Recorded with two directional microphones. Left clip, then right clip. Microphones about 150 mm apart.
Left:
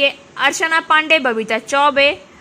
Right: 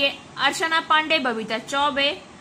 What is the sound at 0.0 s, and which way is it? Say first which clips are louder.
A woman's voice: left 6 dB; 30° left (ahead or behind).